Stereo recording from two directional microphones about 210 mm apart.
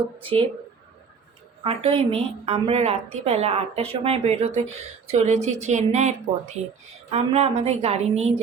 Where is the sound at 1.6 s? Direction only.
25° right (ahead or behind).